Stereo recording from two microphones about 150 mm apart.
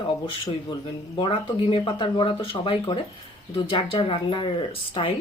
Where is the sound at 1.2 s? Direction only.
35° left (ahead or behind).